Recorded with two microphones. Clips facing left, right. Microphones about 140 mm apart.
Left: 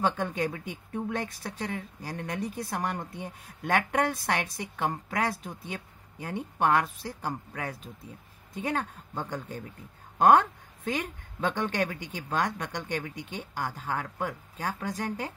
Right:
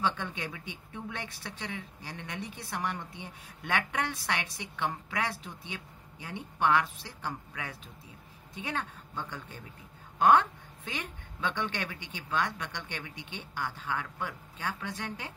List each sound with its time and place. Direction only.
0.0 s speech: 45° left (ahead or behind)